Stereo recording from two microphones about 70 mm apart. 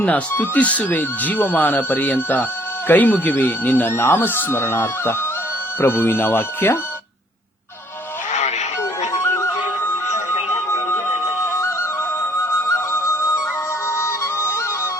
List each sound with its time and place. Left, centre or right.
0.0 s speech: left
8.8 s music: left
11.4 s music: left